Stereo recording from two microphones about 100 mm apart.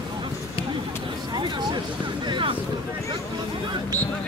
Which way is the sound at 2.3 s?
60° right (ahead or behind).